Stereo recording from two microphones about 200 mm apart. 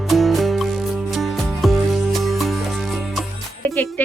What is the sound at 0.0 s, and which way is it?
Music, centre (ahead or behind).